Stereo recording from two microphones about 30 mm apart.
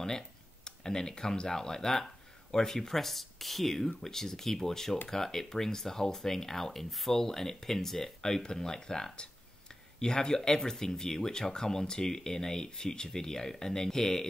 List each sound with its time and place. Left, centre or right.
0.7 s speech: left
8.2 s speech: left